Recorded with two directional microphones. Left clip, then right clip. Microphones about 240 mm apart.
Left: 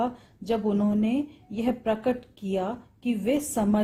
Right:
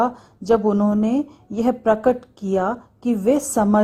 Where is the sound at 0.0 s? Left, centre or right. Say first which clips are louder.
Right 8 dB; right.